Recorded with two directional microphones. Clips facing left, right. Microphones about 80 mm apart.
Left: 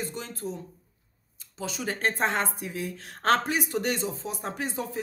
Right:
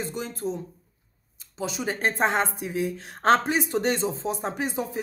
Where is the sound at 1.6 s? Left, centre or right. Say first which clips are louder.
Right 2 dB; centre.